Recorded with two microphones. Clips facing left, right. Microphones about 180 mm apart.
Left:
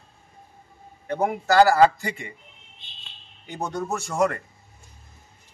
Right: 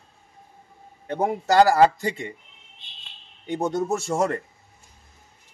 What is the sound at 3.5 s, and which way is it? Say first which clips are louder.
Speech: right 5 dB; 25° right (ahead or behind).